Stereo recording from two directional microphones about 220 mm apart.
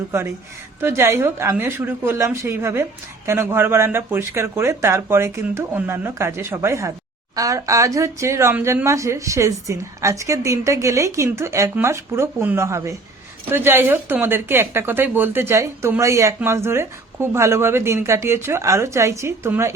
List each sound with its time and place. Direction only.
0.8 s a woman's voice: 10° right (ahead or behind)